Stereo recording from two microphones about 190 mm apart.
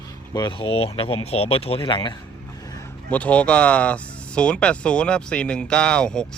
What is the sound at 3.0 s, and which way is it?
Speech, 5° left (ahead or behind).